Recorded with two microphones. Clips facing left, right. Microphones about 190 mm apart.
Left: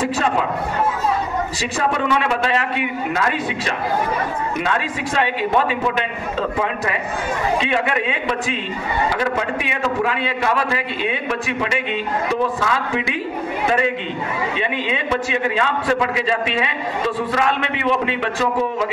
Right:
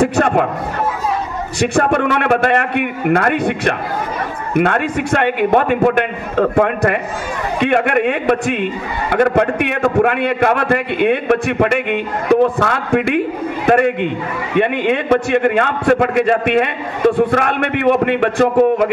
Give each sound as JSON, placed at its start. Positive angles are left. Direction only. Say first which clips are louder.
{"t": 0.0, "sound": "a man's voice", "louder": "right 6 dB", "side_deg": -60}
{"t": 1.8, "sound": "a man's voice", "louder": "right 4 dB", "side_deg": -55}